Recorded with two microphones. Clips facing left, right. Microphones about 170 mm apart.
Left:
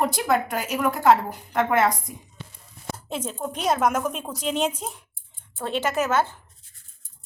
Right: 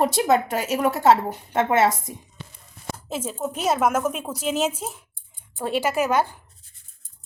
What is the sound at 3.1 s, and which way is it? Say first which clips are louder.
A woman's voice: right 2 dB; 5° right (ahead or behind).